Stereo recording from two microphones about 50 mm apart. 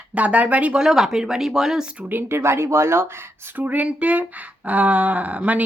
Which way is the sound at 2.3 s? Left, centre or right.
Right.